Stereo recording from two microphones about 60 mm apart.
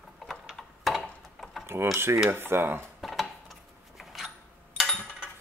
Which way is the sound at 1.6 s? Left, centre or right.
Right.